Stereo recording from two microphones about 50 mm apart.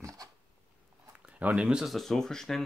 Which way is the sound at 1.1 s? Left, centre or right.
Right.